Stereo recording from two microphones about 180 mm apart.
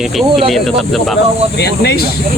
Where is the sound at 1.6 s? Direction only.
65° left (ahead or behind).